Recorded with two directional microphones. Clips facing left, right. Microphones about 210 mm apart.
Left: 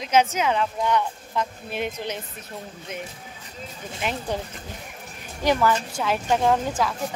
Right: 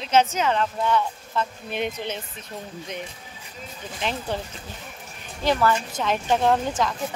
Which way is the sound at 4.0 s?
10° left (ahead or behind).